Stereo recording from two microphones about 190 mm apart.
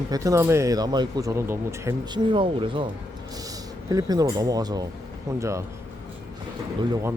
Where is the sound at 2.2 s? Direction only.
25° right (ahead or behind).